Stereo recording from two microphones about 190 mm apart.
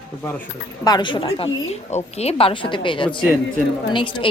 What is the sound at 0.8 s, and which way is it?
A woman's voice, 20° left (ahead or behind).